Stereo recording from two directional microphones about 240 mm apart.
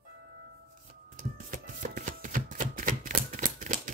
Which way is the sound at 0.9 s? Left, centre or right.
Right.